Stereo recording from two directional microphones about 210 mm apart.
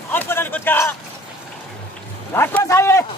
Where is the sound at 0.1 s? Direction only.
10° left (ahead or behind).